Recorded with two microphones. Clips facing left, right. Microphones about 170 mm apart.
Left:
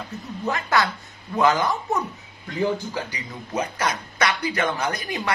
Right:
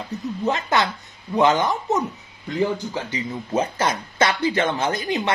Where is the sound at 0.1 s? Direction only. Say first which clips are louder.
Right 4 dB; 20° right (ahead or behind).